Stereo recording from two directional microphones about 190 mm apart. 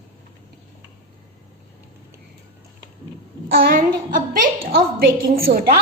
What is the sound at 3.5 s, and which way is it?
A woman's voice, 50° right (ahead or behind).